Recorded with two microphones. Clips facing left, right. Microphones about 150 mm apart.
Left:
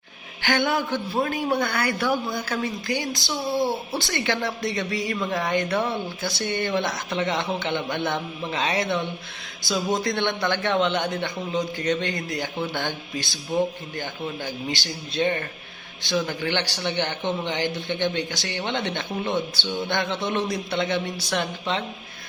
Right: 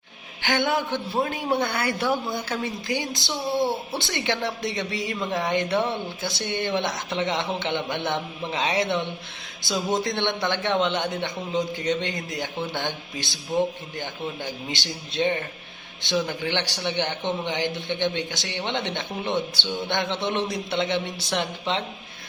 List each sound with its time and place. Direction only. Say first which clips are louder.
0.4 s a man's voice: left 1 dB; 20° right (ahead or behind)